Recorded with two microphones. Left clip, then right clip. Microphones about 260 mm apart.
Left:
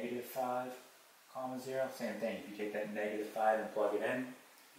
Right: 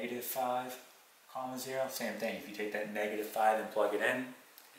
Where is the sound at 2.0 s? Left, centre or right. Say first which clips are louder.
Right 2 dB; centre.